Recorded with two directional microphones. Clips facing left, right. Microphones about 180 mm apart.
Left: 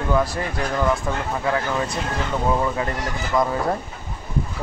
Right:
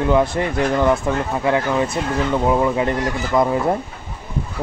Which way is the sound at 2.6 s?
20° right (ahead or behind).